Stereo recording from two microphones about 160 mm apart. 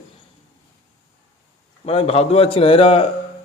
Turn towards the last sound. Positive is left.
turn(degrees=35)  # may be behind; listen again after turning